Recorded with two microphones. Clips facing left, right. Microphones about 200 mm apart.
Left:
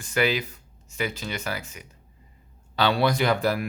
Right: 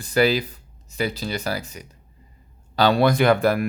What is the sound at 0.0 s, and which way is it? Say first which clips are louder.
Speech: right 5 dB; 35° right (ahead or behind).